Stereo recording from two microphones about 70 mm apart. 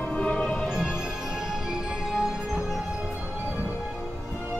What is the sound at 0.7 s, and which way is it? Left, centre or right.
Music, centre.